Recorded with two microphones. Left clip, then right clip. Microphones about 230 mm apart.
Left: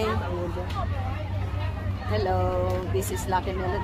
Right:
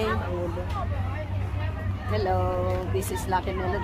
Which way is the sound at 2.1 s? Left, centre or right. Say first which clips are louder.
Even; centre.